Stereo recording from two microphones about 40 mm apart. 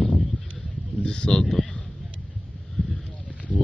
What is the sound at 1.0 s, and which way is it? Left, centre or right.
Speech, left.